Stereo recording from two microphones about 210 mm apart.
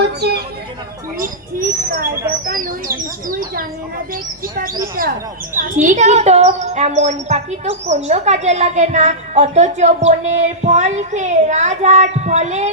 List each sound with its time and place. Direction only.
0.0 s speech: 50° right (ahead or behind); by 12.7 s 30° right (ahead or behind)